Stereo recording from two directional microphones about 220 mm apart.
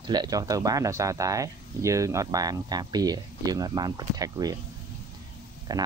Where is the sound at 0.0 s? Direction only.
20° right (ahead or behind).